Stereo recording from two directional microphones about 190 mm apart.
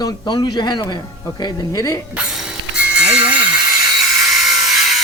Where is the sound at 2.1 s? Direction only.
5° right (ahead or behind).